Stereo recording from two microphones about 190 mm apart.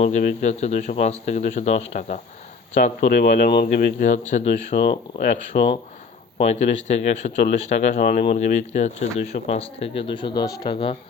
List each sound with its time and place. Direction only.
0.0 s speech: 40° left (ahead or behind)